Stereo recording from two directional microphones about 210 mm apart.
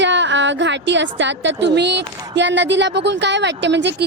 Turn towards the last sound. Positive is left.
turn(degrees=-55)  # may be behind; listen again after turning